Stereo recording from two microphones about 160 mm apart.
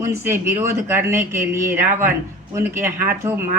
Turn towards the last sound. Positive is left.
turn(degrees=-15)  # may be behind; listen again after turning